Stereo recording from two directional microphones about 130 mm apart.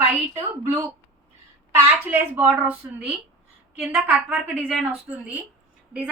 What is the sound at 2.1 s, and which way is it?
A woman's voice, 15° right (ahead or behind).